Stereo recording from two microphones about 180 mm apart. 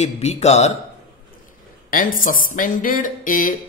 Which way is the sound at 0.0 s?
35° left (ahead or behind).